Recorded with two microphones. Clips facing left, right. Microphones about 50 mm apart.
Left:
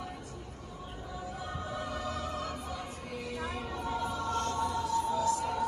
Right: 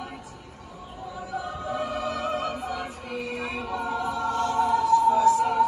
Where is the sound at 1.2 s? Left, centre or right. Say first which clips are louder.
Right 8 dB; right.